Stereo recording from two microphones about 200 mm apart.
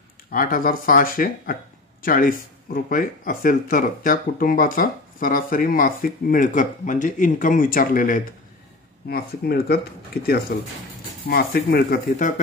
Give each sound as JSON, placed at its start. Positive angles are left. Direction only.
{"t": 0.3, "sound": "speech", "side_deg": 45}